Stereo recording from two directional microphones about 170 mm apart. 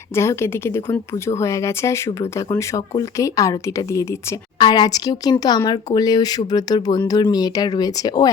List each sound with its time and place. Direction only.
0.2 s a woman's voice: 15° left (ahead or behind)